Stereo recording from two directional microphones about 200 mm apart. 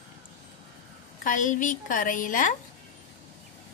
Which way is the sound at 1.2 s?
40° left (ahead or behind).